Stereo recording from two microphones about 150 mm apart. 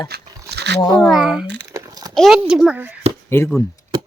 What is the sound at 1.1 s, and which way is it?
Speech, 5° right (ahead or behind).